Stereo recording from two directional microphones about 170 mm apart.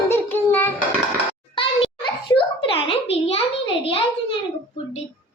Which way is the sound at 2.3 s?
30° left (ahead or behind).